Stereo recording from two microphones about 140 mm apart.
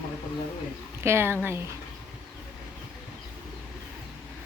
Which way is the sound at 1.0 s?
15° right (ahead or behind).